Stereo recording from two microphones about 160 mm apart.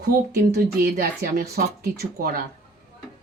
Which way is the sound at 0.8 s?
70° right (ahead or behind).